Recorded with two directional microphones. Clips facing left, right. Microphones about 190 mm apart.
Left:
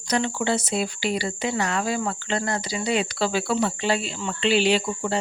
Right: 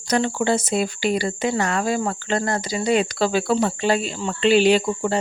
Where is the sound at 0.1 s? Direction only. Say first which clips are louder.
Right 4 dB; 45° right (ahead or behind).